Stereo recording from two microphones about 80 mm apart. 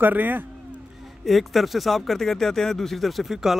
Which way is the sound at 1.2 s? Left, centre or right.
Centre.